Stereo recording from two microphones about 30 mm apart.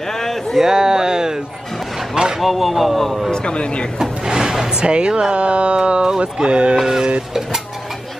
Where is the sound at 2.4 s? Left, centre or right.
Centre.